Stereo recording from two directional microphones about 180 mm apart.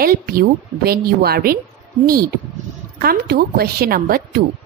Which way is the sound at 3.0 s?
60° right (ahead or behind).